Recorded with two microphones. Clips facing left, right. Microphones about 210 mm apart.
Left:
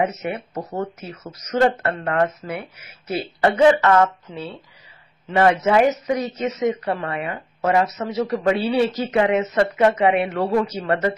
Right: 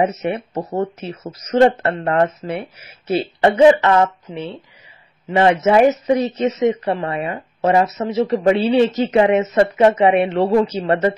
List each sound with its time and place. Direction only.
0.0 s speech: 30° right (ahead or behind)
5.3 s speech: 20° right (ahead or behind)